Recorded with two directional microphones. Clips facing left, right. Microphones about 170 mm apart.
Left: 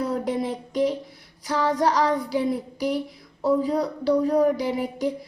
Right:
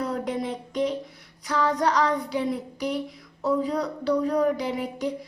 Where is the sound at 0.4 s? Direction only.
35° left (ahead or behind).